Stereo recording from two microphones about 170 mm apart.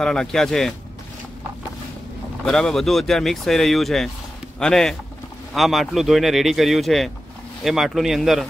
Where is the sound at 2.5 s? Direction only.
5° left (ahead or behind).